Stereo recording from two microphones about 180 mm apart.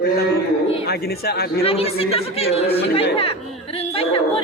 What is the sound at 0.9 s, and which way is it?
Speech, 60° left (ahead or behind).